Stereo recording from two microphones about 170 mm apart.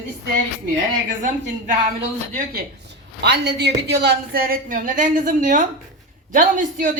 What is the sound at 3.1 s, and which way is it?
A woman's voice, 85° right.